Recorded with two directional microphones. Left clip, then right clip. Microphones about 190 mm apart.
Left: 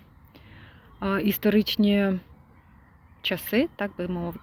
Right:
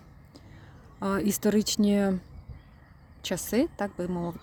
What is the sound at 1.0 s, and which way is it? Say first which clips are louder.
Speech: left 2 dB; 20° right (ahead or behind).